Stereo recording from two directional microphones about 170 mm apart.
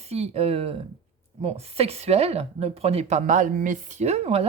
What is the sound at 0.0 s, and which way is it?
Speech, 35° right (ahead or behind).